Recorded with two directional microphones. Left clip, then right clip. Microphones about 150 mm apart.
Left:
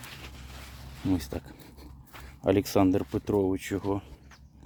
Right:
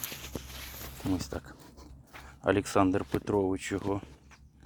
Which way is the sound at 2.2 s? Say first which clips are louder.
Left 2 dB; 25° left (ahead or behind).